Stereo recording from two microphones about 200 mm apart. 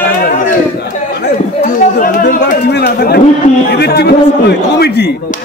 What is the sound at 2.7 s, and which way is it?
Chatter, 50° left (ahead or behind).